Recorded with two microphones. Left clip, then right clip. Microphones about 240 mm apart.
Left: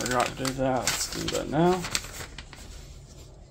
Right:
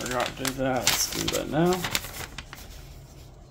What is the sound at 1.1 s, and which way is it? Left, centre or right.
Speech, right.